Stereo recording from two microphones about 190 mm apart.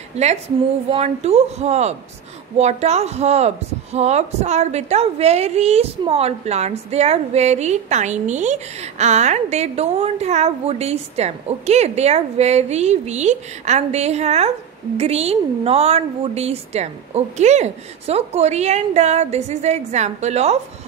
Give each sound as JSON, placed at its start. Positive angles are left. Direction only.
{"t": 0.1, "sound": "a woman's voice", "side_deg": -35}